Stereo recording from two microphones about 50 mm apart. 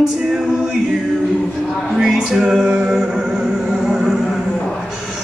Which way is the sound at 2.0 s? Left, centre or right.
Centre.